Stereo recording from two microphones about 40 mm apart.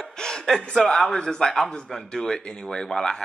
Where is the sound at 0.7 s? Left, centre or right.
Centre.